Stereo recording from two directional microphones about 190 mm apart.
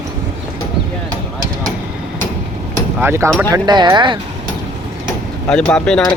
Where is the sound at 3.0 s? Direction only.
15° right (ahead or behind).